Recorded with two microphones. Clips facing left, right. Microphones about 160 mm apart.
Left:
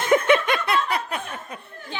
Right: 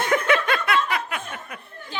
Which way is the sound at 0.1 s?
20° left (ahead or behind).